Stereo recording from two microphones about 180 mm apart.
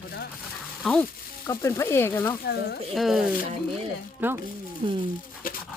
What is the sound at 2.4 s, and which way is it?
Speech, 60° left (ahead or behind).